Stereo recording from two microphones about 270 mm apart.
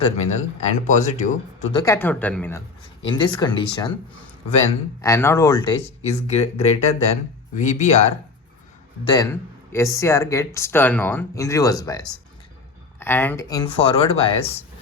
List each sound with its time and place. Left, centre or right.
0.0 s speech: left
1.8 s speech: centre
3.0 s speech: centre
4.9 s speech: centre
9.1 s speech: centre